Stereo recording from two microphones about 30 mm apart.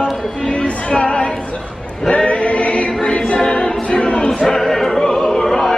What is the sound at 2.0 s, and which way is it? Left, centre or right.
Choir, left.